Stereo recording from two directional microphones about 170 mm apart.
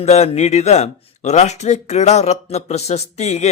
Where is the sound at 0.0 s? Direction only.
40° left (ahead or behind).